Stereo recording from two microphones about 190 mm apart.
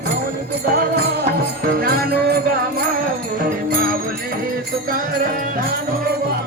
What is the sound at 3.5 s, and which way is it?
Music, 50° right (ahead or behind).